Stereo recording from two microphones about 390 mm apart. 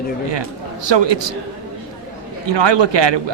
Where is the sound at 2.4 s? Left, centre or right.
Right.